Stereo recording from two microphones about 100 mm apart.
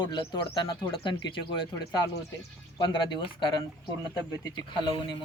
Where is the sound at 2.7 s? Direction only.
50° left (ahead or behind).